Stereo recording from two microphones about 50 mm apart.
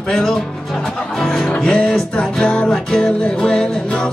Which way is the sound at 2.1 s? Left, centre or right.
Centre.